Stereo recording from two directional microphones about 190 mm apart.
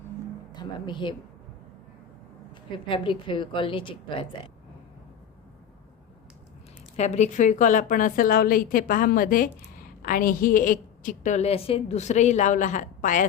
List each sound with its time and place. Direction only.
0.5 s speech: 25° left (ahead or behind)
2.7 s a woman's voice: 25° left (ahead or behind)
6.9 s a woman's voice: 35° left (ahead or behind)